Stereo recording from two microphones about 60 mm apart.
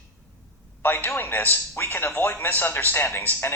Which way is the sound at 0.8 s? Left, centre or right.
Left.